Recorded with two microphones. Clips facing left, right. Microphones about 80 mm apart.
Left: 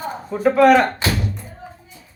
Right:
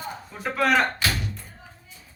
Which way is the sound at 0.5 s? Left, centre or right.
Centre.